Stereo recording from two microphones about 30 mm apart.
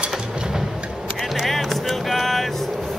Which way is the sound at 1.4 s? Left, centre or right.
Centre.